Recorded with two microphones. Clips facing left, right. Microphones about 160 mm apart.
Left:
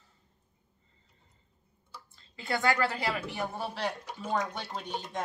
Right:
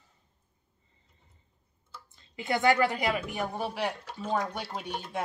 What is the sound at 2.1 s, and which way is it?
Speech, 20° right (ahead or behind).